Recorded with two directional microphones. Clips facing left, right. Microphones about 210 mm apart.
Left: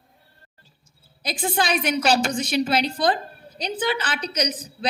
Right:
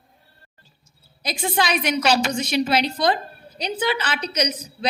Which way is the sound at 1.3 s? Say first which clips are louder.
Right 1 dB; 45° left (ahead or behind).